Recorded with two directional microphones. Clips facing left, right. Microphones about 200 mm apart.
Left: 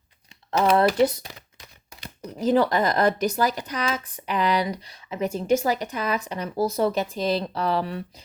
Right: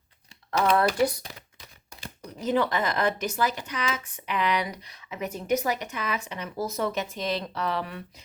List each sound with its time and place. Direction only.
0.8 s speech: 20° left (ahead or behind)
2.4 s a woman's voice: 35° left (ahead or behind)